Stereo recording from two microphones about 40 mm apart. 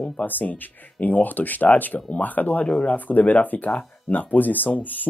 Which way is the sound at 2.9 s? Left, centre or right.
Left.